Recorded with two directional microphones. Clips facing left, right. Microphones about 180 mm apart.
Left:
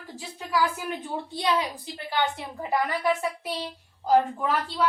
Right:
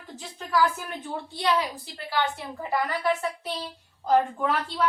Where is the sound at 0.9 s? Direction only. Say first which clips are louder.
Left 2 dB; 15° left (ahead or behind).